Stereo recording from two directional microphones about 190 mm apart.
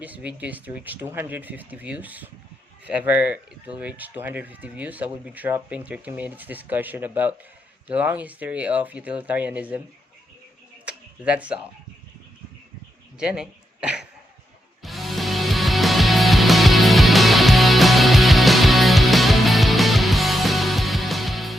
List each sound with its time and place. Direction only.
0.0 s speech: 5° right (ahead or behind)
10.8 s a sound: 5° right (ahead or behind)
13.1 s speech: 5° right (ahead or behind)
14.8 s music: centre (ahead or behind)